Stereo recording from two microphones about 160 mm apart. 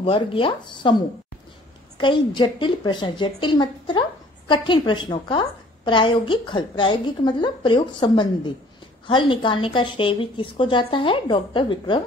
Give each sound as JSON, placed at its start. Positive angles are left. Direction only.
{"t": 0.0, "sound": "a woman's voice", "side_deg": 35}